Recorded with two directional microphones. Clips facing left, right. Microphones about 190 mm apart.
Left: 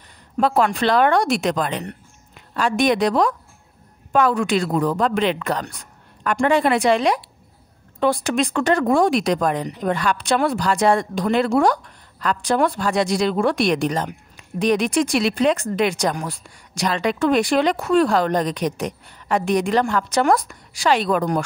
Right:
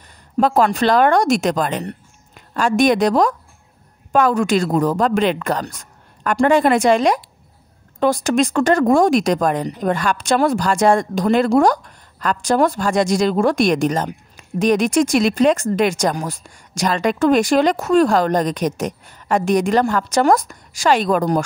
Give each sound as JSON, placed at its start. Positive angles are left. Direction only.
{"t": 0.4, "sound": "speech", "side_deg": -40}